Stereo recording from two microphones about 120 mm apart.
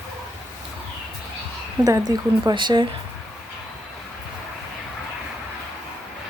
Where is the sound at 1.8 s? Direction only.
30° right (ahead or behind).